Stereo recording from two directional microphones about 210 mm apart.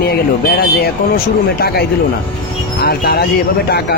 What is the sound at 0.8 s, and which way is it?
A man's voice, 45° left (ahead or behind).